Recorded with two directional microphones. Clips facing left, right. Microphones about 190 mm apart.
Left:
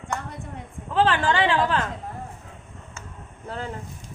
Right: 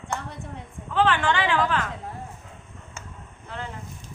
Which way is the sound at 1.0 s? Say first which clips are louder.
Left 1 dB; 35° left (ahead or behind).